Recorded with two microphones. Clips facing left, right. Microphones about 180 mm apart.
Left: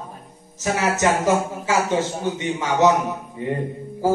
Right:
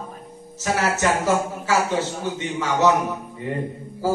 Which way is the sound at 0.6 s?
15° left (ahead or behind).